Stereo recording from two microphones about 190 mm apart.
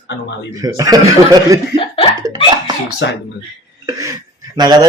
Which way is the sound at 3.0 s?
70° left (ahead or behind).